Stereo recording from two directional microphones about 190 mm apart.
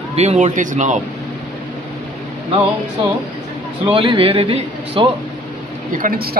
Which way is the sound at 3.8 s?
25° right (ahead or behind).